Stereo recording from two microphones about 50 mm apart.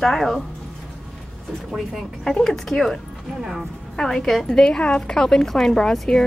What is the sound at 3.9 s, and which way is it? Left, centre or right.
A woman's voice, centre.